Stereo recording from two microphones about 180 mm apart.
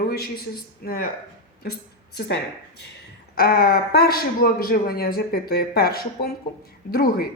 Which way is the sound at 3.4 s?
55° left (ahead or behind).